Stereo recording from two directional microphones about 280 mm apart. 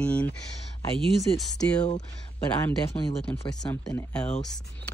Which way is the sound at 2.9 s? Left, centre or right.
Left.